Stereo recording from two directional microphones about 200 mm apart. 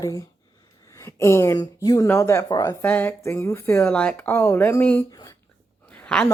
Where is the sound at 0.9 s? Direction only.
15° left (ahead or behind).